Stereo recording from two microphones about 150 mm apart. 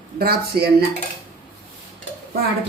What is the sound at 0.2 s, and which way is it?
Speech, 90° right.